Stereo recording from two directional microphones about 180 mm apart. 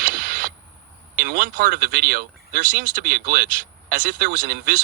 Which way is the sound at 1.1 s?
50° right (ahead or behind).